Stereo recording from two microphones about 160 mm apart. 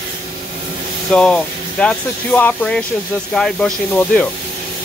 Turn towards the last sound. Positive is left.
turn(degrees=0)  # may be behind; listen again after turning